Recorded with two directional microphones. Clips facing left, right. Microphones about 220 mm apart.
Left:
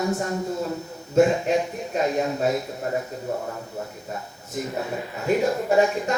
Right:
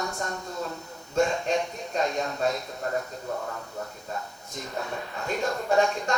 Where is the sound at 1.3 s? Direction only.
5° left (ahead or behind).